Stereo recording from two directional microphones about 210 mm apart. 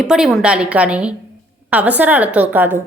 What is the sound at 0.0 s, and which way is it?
A woman's voice, centre (ahead or behind).